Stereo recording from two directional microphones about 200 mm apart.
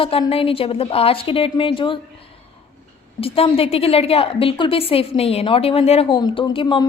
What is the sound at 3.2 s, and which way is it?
A woman's voice, 30° left (ahead or behind).